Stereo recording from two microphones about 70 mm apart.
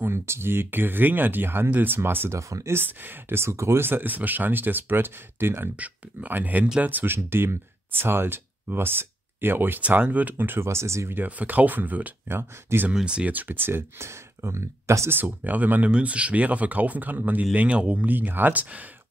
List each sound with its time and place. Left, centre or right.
0.0 s speech: right
11.1 s speech: right
12.9 s speech: centre; by 15.1 s right
15.1 s speech: right